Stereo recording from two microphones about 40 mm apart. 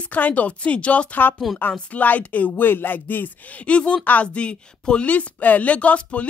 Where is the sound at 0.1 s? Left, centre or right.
Left.